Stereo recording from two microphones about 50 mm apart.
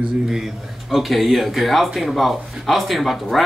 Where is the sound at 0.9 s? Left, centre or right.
Centre.